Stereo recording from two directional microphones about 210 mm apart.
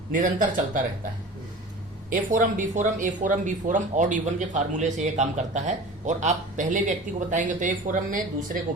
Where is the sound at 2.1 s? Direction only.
40° right (ahead or behind).